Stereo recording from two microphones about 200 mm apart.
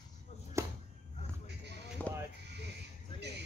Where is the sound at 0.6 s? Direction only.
15° right (ahead or behind).